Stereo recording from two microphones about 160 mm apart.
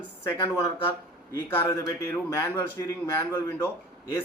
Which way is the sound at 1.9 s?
15° left (ahead or behind).